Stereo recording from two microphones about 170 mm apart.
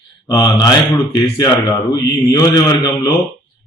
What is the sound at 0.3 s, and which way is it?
Speech, 20° left (ahead or behind).